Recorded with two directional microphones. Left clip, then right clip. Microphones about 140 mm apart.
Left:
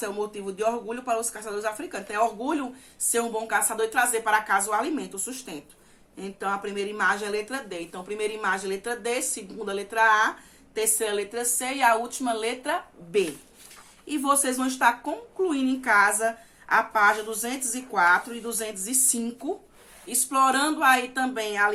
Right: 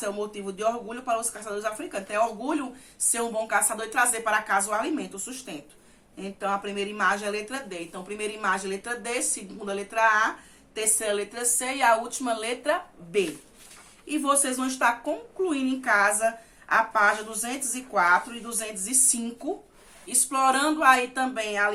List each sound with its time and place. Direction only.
0.0 s a woman's voice: 20° left (ahead or behind)